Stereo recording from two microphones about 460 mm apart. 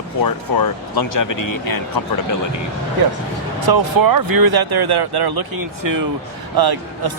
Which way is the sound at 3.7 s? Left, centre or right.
Right.